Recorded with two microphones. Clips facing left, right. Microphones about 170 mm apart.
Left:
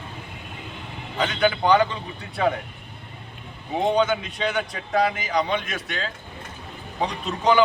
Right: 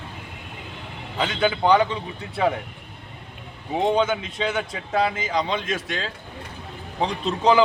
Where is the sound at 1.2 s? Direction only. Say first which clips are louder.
Even; 25° right (ahead or behind).